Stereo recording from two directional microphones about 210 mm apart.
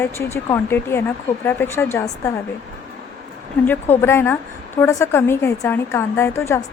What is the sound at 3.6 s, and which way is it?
Speech, 10° left (ahead or behind).